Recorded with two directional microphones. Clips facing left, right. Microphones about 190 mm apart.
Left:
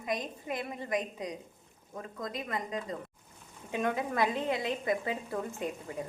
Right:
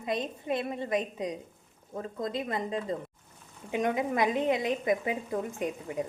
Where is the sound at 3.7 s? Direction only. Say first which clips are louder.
Right 3 dB; 15° right (ahead or behind).